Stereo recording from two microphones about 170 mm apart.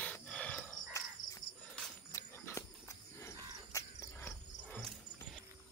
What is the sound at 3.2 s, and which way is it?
Cricket, 20° left (ahead or behind).